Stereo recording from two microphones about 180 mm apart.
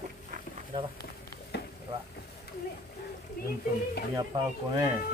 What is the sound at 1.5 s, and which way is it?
Frying, 70° left (ahead or behind).